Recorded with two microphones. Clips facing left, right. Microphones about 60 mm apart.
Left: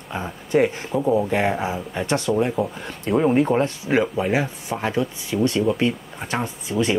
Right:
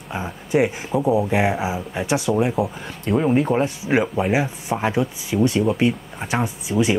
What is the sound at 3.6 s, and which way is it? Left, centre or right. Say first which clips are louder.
Speech: even; centre.